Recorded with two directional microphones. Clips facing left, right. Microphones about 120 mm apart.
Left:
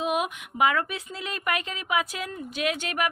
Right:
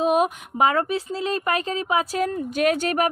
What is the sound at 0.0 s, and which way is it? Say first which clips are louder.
A woman's voice: right 7 dB; 35° right (ahead or behind).